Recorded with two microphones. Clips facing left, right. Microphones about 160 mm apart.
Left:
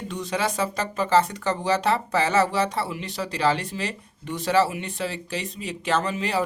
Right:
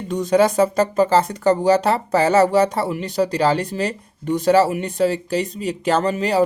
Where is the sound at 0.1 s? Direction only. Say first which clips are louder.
Right 12 dB; 40° right (ahead or behind).